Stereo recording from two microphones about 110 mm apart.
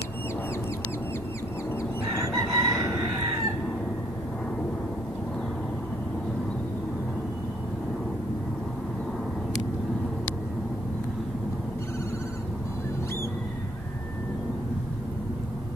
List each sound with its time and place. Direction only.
2.1 s chicken: 30° right (ahead or behind)